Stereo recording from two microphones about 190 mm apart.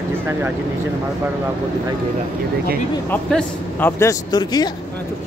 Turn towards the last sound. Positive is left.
turn(degrees=20)  # may be behind; listen again after turning